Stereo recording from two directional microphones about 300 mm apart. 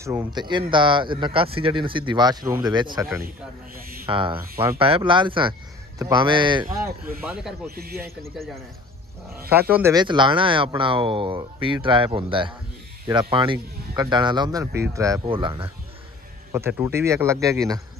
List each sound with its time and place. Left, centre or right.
0.0 s speech: centre
7.7 s speech: right
9.5 s speech: centre